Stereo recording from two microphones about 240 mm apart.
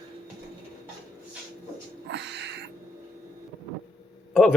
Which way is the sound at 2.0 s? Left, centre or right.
Right.